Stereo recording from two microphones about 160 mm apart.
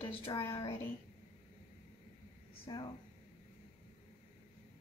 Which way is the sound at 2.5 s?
35° left (ahead or behind).